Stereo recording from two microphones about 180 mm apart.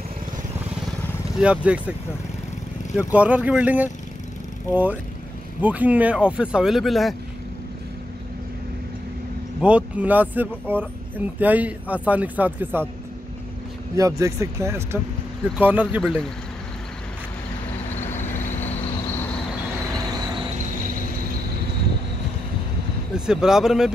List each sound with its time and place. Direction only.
1.4 s speech: 5° right (ahead or behind)
3.0 s speech: 10° right (ahead or behind)
5.6 s speech: 10° right (ahead or behind)
9.6 s speech: 5° right (ahead or behind)
13.9 s speech: 20° right (ahead or behind)
16.0 s speech: 5° left (ahead or behind)
18.2 s vehicle: 40° left (ahead or behind)
23.1 s speech: 5° right (ahead or behind)